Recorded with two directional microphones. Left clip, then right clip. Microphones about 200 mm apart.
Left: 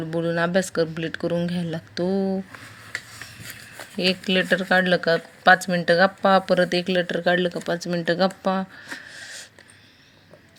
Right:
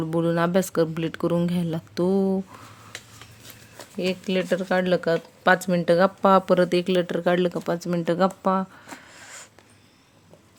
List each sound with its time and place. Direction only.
0.0 s speech: 20° right (ahead or behind)
3.8 s speech: centre (ahead or behind)